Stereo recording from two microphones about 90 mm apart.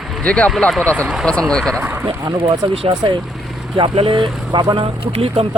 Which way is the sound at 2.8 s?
70° right (ahead or behind).